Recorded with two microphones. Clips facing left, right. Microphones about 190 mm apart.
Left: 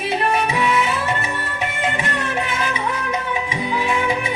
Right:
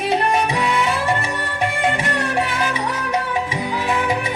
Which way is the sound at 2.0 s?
Centre (ahead or behind).